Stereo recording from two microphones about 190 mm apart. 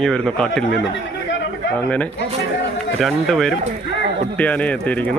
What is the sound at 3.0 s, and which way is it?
Speech, centre (ahead or behind).